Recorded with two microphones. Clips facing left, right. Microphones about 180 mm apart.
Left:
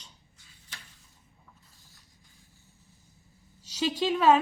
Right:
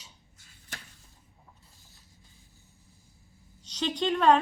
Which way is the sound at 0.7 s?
50° right (ahead or behind).